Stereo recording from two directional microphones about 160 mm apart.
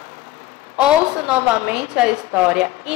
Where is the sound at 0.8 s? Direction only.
5° right (ahead or behind).